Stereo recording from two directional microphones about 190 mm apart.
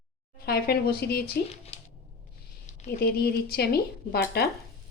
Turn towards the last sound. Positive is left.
turn(degrees=55)  # may be behind; listen again after turning